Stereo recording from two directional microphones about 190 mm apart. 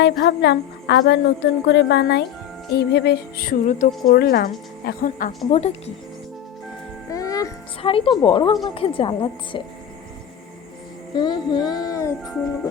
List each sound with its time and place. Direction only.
0.0 s speech: 60° left (ahead or behind); by 5.3 s 45° left (ahead or behind)
5.5 s speech: 35° left (ahead or behind)
7.1 s music: 15° left (ahead or behind)
7.8 s speech: 30° left (ahead or behind)
11.1 s speech: 25° left (ahead or behind)